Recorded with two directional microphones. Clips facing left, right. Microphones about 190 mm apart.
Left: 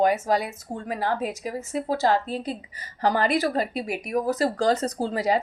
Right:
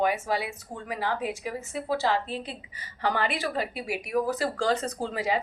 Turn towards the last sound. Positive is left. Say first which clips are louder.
# left 5 dB
turn(degrees=40)  # may be behind; listen again after turning